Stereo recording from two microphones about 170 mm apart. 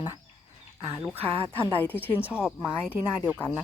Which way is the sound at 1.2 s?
35° right (ahead or behind).